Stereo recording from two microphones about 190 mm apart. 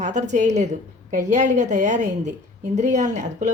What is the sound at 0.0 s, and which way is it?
Speech, 40° right (ahead or behind).